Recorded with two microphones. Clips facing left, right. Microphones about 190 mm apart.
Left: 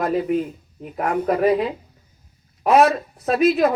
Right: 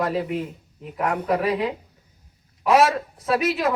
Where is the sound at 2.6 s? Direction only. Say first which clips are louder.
Left 2 dB; 90° right.